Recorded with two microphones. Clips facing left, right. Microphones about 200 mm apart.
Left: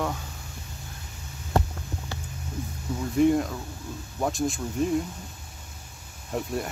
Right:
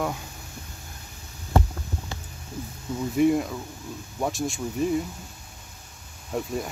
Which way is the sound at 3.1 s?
5° right (ahead or behind).